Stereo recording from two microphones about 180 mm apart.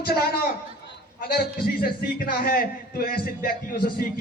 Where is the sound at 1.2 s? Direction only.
60° left (ahead or behind).